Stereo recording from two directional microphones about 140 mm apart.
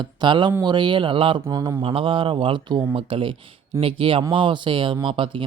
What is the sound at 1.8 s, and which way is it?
Speech, 40° right (ahead or behind).